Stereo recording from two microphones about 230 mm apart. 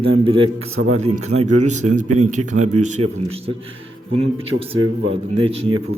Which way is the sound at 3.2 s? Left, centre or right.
Right.